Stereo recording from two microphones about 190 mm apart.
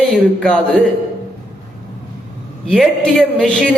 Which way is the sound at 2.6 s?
5° left (ahead or behind).